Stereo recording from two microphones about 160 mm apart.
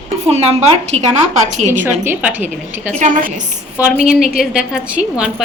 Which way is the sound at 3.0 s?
50° right (ahead or behind).